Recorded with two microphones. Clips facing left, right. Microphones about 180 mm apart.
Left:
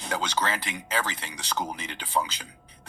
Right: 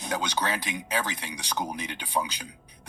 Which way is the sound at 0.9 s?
15° right (ahead or behind).